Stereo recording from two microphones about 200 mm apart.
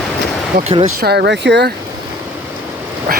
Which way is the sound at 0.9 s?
55° right (ahead or behind).